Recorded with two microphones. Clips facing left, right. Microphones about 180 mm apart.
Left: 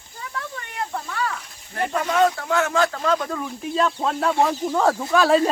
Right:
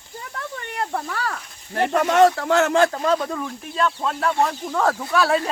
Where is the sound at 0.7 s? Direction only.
55° right (ahead or behind).